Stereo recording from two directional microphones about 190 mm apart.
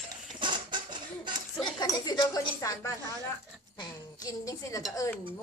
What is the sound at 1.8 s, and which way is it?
A woman's voice, 20° left (ahead or behind).